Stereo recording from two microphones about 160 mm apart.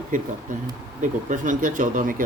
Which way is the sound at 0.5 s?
55° right (ahead or behind).